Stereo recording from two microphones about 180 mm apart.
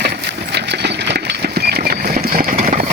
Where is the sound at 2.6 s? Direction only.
50° right (ahead or behind).